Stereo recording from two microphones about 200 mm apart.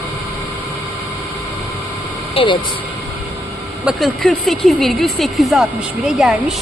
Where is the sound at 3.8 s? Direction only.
Centre (ahead or behind).